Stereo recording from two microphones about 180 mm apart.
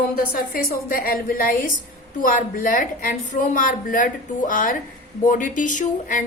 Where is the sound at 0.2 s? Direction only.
55° left (ahead or behind).